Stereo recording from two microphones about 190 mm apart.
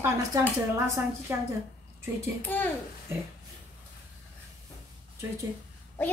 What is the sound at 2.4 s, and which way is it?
Speech, 10° left (ahead or behind).